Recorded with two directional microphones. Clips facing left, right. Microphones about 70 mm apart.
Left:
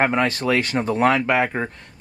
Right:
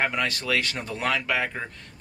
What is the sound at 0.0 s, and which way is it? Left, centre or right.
Speech, left.